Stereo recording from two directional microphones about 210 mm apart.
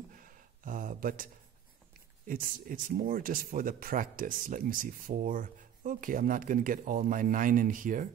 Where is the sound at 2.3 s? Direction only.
40° right (ahead or behind).